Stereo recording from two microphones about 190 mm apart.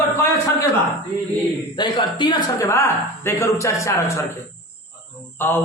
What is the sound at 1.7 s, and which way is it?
A woman's voice, 25° left (ahead or behind).